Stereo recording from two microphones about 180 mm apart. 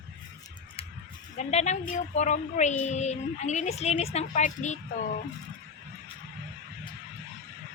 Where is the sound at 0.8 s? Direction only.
30° left (ahead or behind).